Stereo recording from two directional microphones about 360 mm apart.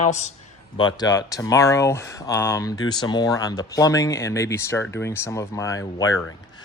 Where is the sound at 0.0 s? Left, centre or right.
Centre.